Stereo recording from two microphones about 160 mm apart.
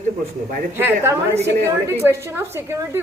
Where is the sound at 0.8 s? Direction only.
15° right (ahead or behind).